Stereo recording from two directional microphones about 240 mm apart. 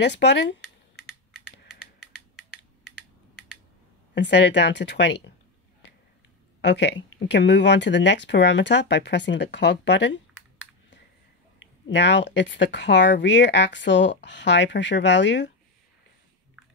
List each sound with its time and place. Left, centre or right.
0.0 s speech: left
4.1 s speech: left
6.6 s speech: left
11.9 s speech: left